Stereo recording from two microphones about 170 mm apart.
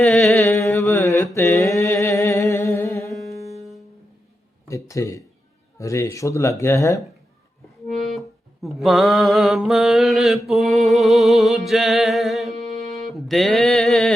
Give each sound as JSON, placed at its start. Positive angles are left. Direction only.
{"t": 0.0, "sound": "music", "side_deg": 0}
{"t": 0.8, "sound": "mantra", "side_deg": 15}
{"t": 4.7, "sound": "speech", "side_deg": 20}
{"t": 8.6, "sound": "music", "side_deg": 0}
{"t": 13.1, "sound": "mantra", "side_deg": 0}